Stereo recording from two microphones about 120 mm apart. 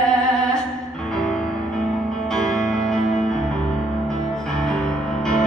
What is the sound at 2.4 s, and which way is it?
Music, 5° left (ahead or behind).